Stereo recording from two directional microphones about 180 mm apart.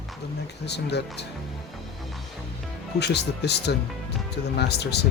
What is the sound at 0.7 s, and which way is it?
Speech, 70° left (ahead or behind).